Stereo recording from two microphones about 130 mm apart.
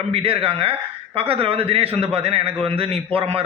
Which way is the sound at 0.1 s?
45° right (ahead or behind).